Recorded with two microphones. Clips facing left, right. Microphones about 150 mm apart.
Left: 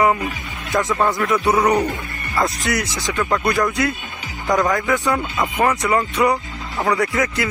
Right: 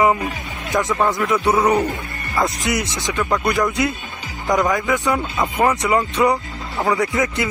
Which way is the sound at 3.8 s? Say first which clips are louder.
Even; 20° right (ahead or behind).